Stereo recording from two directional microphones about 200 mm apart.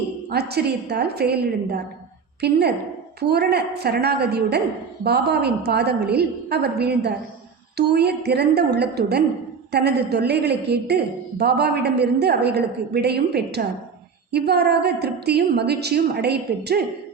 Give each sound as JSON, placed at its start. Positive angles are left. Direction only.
{"t": 0.3, "sound": "a woman's voice", "side_deg": -55}